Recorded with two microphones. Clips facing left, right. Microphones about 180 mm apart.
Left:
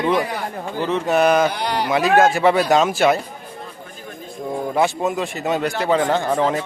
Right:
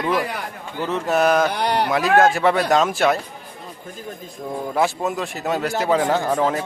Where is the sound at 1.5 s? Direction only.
60° right (ahead or behind).